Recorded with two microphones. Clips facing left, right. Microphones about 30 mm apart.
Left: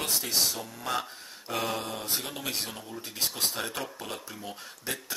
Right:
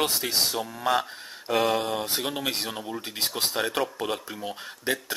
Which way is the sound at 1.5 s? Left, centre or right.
Centre.